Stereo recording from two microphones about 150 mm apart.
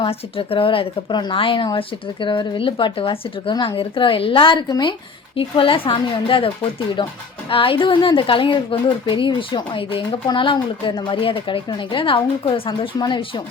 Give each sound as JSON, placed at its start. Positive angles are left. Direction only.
{"t": 0.0, "sound": "a woman's voice", "side_deg": 40}